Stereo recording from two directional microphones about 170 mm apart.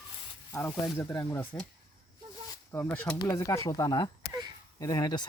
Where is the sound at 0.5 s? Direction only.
15° left (ahead or behind).